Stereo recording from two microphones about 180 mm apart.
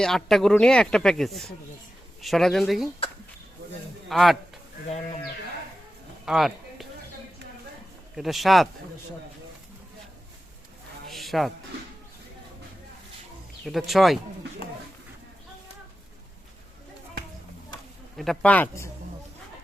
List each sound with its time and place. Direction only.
0.0 s speech: centre (ahead or behind)
4.1 s speech: centre (ahead or behind)
4.9 s speech: 40° left (ahead or behind)
6.2 s a sound: centre (ahead or behind)
8.1 s speech: centre (ahead or behind)
11.1 s music: centre (ahead or behind)
13.7 s speech: centre (ahead or behind)
18.2 s speech: 5° left (ahead or behind)